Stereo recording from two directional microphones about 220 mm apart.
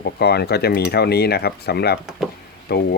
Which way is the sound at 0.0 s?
45° left (ahead or behind).